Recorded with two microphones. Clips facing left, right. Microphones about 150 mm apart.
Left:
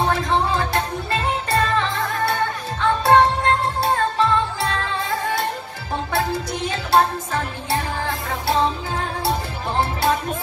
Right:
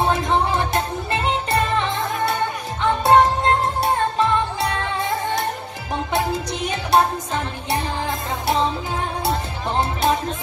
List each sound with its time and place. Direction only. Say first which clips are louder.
0.0 s music: right 1 dB; 20° right (ahead or behind)